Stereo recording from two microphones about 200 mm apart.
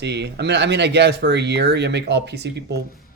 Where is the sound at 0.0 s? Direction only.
60° right (ahead or behind).